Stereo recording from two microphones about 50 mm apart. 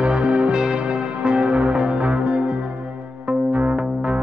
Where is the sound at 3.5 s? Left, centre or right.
Right.